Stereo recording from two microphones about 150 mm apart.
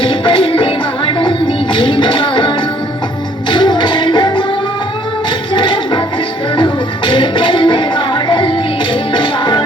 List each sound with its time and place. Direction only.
0.0 s music: 35° left (ahead or behind)
5.5 s music: 30° left (ahead or behind)